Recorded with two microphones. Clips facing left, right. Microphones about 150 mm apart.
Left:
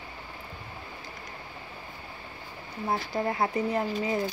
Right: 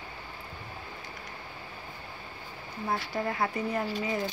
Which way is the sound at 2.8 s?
30° left (ahead or behind).